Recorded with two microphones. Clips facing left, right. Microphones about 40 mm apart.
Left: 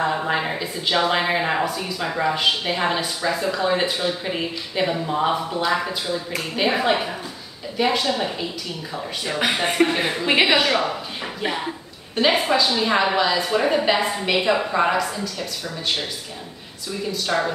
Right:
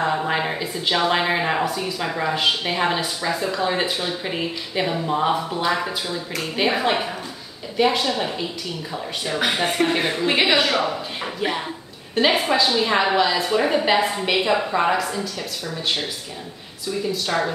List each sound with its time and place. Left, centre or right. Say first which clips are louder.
0.0 s a woman's voice: even; centre
17.0 s a woman's voice: left 1 dB; centre